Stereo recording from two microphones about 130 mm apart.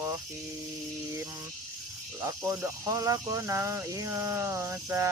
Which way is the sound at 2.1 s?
25° right (ahead or behind).